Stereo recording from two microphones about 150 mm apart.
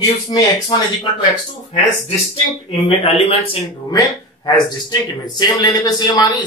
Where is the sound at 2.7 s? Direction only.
40° left (ahead or behind).